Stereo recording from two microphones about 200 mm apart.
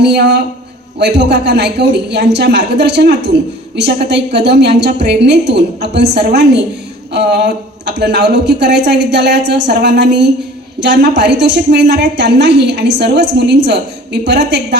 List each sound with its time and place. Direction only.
0.0 s a woman's voice: 60° right (ahead or behind)